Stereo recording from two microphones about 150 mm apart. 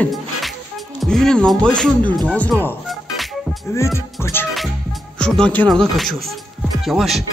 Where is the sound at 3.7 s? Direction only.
20° left (ahead or behind).